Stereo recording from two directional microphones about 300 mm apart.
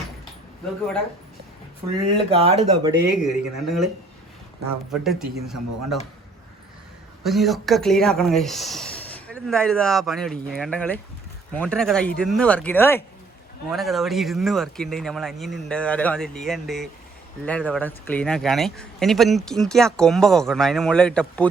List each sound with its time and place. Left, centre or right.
2.1 s speech: centre
3.1 s speech: centre
4.9 s speech: centre
7.3 s speech: centre